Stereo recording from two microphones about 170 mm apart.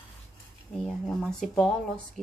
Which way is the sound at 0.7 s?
5° left (ahead or behind).